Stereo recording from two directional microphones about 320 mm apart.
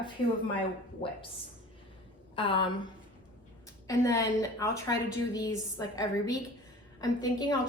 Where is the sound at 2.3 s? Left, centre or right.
Centre.